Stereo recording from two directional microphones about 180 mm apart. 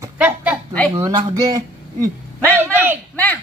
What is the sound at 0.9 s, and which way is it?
Speech, 20° right (ahead or behind).